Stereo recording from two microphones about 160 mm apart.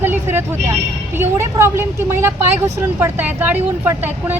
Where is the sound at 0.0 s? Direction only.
15° right (ahead or behind).